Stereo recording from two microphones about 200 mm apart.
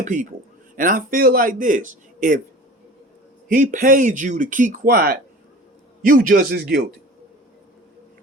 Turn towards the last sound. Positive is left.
turn(degrees=-55)  # may be behind; listen again after turning